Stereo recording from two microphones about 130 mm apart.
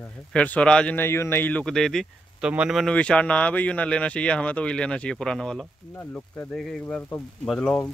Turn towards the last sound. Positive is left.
turn(degrees=5)  # may be behind; listen again after turning